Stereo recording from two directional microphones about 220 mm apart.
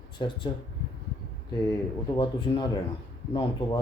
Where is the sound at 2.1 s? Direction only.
20° left (ahead or behind).